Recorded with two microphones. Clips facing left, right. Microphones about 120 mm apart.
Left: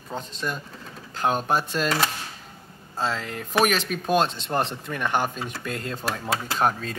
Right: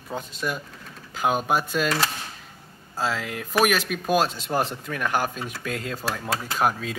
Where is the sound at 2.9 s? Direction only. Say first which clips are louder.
Right 1 dB; 5° right (ahead or behind).